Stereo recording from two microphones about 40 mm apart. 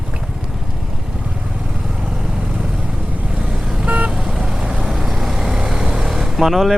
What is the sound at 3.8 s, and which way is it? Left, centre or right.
Vehicle, right.